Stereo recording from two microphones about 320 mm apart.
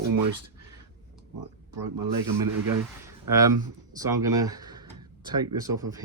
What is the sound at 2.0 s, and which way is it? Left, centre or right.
Speech, right.